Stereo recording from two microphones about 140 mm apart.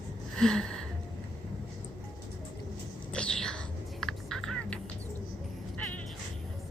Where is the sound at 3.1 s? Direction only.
5° left (ahead or behind).